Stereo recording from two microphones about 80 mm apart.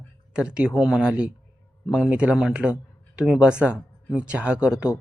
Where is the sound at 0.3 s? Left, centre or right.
Centre.